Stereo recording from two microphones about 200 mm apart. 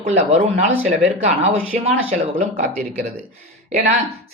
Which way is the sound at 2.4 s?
35° right (ahead or behind).